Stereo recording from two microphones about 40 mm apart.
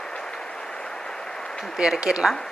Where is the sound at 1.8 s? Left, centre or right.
Centre.